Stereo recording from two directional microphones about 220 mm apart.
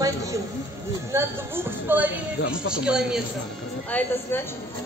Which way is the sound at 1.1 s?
10° right (ahead or behind).